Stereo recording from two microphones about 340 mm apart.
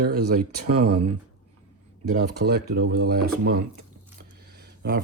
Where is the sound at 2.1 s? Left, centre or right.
Right.